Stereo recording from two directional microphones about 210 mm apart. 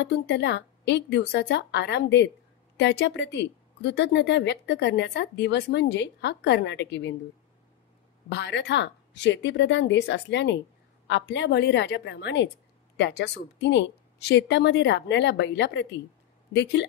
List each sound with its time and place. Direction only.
0.0 s a woman's voice: 55° left (ahead or behind)
8.3 s a woman's voice: 55° left (ahead or behind)